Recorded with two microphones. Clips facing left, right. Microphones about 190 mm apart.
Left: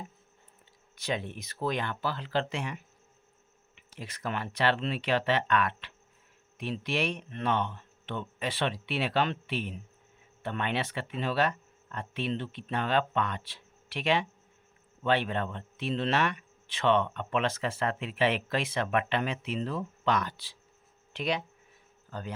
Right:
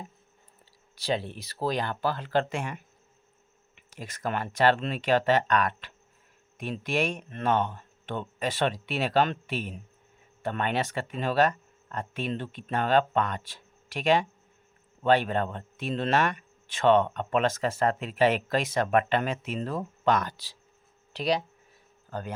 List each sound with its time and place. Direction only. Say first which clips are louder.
0.9 s a man's voice: right 4 dB; 35° right (ahead or behind)
22.1 s a man's voice: right 4 dB; 50° right (ahead or behind)